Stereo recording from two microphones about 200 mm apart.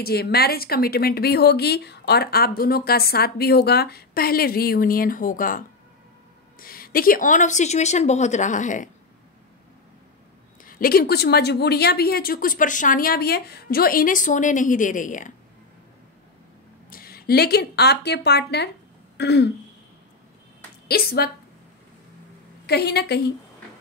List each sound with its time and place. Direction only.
0.0 s speech: 50° left (ahead or behind)
6.6 s a woman's voice: 45° left (ahead or behind)
10.6 s speech: 45° left (ahead or behind)
16.9 s speech: 50° left (ahead or behind)
19.1 s throat clearing: 55° left (ahead or behind)
20.9 s speech: 50° left (ahead or behind)
22.7 s a woman's voice: 55° left (ahead or behind)